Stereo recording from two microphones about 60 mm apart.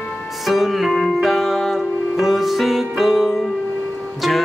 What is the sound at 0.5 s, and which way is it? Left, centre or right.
Music, centre.